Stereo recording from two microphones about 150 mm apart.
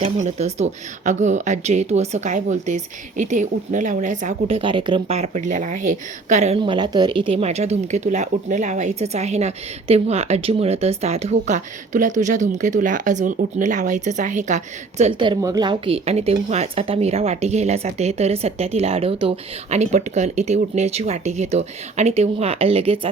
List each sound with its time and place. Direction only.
0.0 s speech: 50° right (ahead or behind)
4.4 s a woman's voice: 35° right (ahead or behind)
5.1 s a woman's voice: 50° right (ahead or behind)
6.6 s speech: 30° right (ahead or behind); by 15.1 s 50° right (ahead or behind)
15.2 s speech: 25° right (ahead or behind)